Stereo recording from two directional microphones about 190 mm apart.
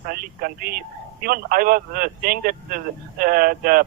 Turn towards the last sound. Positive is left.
turn(degrees=-50)  # may be behind; listen again after turning